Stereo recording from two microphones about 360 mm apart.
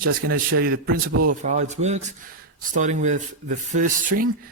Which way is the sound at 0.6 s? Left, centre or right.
Right.